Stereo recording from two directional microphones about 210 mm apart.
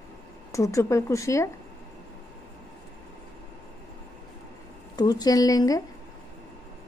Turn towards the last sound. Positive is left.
turn(degrees=15)  # may be behind; listen again after turning